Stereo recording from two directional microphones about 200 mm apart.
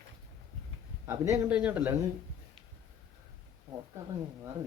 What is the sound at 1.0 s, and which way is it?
Speech, 15° right (ahead or behind).